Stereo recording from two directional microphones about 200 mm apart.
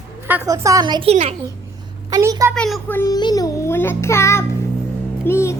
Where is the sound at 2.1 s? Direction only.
15° right (ahead or behind).